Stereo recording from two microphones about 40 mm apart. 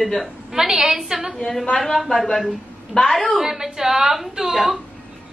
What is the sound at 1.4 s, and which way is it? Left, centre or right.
Speech, centre.